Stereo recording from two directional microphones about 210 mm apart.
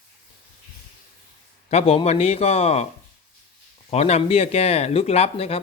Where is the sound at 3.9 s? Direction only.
30° left (ahead or behind).